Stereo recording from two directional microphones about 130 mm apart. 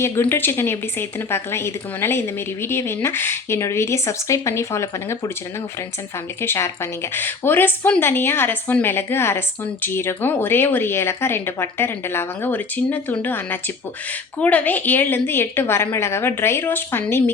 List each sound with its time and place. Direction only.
0.0 s speech: 15° left (ahead or behind)
6.4 s speech: 20° left (ahead or behind)